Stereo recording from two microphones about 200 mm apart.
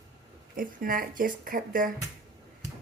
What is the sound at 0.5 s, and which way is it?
Speech, 45° right (ahead or behind).